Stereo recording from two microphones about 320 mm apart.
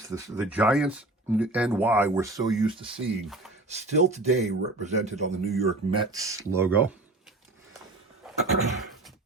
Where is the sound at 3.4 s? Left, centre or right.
Centre.